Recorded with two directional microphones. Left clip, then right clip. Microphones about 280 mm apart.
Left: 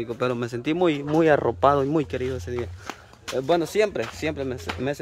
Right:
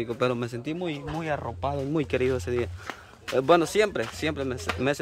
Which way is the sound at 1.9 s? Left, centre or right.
Centre.